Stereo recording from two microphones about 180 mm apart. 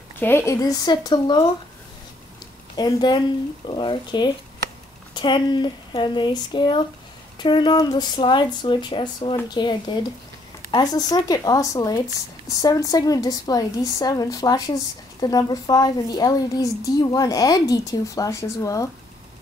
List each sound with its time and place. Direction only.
0.2 s a woman's voice: 15° left (ahead or behind)
2.7 s a woman's voice: 25° left (ahead or behind)